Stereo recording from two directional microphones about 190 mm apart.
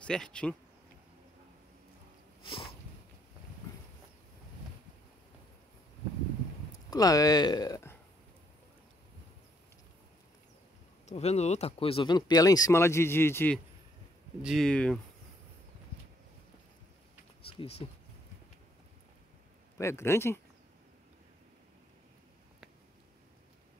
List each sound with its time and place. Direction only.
0.0 s speech: 5° left (ahead or behind)
2.4 s sniff: 25° left (ahead or behind)
6.9 s speech: 20° left (ahead or behind)
11.1 s speech: 35° left (ahead or behind); by 13.6 s 10° left (ahead or behind)
14.4 s speech: centre (ahead or behind)
17.5 s speech: 30° left (ahead or behind)
19.8 s speech: 15° left (ahead or behind)